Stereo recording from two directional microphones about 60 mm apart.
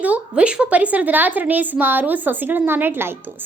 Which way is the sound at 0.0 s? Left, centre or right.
Right.